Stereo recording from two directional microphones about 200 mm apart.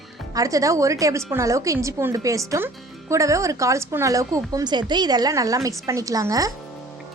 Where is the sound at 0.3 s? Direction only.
15° right (ahead or behind).